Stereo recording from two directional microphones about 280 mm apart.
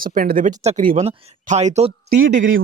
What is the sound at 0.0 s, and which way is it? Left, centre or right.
Speech, right.